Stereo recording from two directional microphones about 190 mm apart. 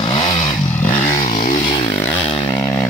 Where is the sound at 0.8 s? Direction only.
45° left (ahead or behind).